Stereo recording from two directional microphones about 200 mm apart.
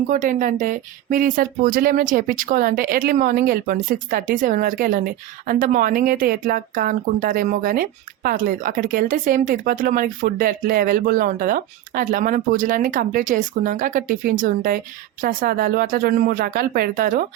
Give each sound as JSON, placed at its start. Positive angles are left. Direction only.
{"t": 0.1, "sound": "speech", "side_deg": -40}